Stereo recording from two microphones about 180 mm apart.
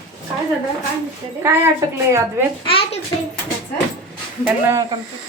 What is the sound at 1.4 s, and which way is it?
Speech, 15° right (ahead or behind).